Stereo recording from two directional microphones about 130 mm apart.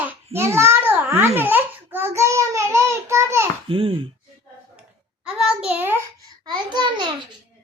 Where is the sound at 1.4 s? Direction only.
15° right (ahead or behind).